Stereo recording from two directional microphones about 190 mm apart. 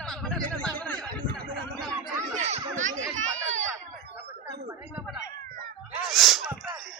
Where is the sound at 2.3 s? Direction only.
40° right (ahead or behind).